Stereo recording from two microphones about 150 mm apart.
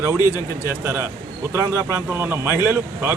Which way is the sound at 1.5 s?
15° right (ahead or behind).